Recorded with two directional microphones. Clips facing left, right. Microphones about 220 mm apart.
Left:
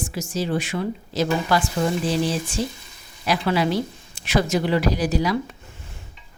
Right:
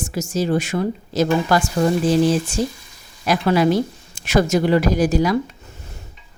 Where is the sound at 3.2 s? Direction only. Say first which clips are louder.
Right 5 dB; 45° right (ahead or behind).